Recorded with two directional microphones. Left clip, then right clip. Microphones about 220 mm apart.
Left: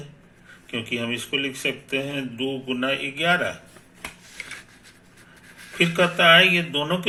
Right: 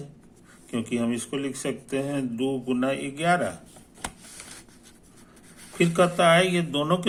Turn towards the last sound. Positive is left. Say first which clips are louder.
# left 1 dB
turn(degrees=-25)  # may be behind; listen again after turning